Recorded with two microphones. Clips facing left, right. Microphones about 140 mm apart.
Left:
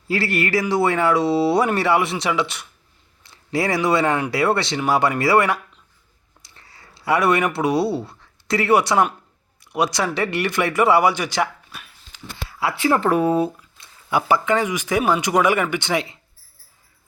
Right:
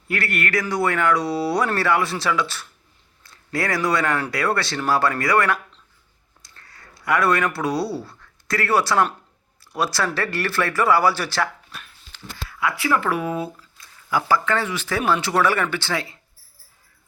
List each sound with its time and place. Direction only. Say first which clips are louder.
0.1 s speech: left 3 dB; 25° left (ahead or behind)
11.7 s dog: even; 5° left (ahead or behind)
12.5 s speech: left 3 dB; 30° left (ahead or behind)
13.6 s speech: even; 25° left (ahead or behind)